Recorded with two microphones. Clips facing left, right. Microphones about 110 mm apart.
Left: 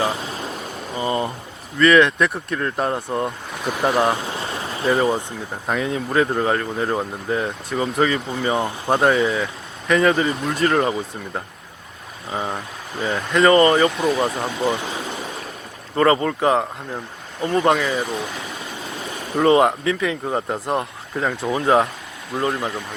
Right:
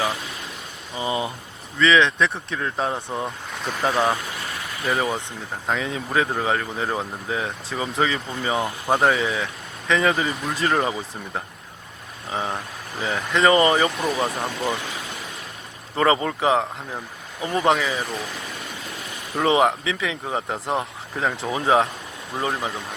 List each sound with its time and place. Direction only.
1.0 s a sound: 5° right (ahead or behind)
1.8 s speech: 5° left (ahead or behind)
4.1 s a sound: 25° left (ahead or behind)
5.6 s speech: 5° left (ahead or behind)
14.6 s speech: 25° left (ahead or behind)
16.0 s speech: 10° right (ahead or behind)
19.4 s speech: centre (ahead or behind)